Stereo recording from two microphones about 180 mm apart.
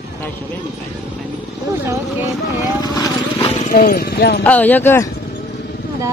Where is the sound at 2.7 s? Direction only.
20° left (ahead or behind).